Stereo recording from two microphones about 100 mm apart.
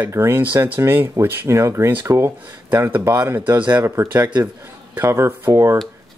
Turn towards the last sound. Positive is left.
turn(degrees=-25)  # may be behind; listen again after turning